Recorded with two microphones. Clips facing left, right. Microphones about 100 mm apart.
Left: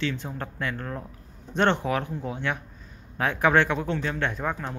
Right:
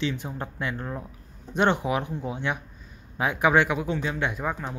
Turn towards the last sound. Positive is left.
turn(degrees=-5)  # may be behind; listen again after turning